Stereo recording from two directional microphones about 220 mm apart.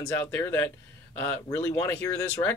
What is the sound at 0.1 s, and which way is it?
Speech, 10° left (ahead or behind).